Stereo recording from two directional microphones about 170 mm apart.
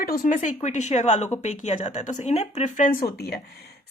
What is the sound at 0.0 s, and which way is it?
Speech, 55° left (ahead or behind).